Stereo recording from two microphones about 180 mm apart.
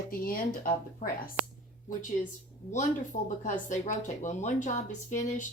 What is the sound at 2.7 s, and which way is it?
Speech, 40° left (ahead or behind).